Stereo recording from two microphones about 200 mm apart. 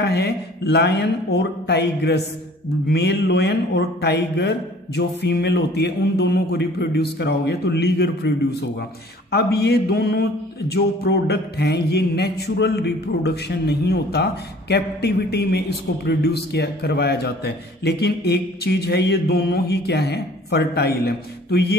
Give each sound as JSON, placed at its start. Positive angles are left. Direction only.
{"t": 0.0, "sound": "a man's voice", "side_deg": 55}